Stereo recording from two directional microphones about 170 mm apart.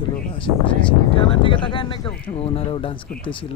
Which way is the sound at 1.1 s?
30° left (ahead or behind).